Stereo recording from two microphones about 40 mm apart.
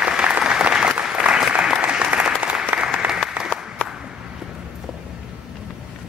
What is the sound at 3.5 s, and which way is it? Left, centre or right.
Applause, left.